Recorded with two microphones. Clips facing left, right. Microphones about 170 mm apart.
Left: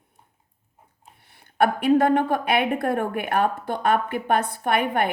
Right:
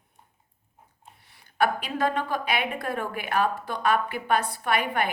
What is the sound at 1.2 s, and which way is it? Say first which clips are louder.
A woman's voice: left 4 dB; 55° left (ahead or behind).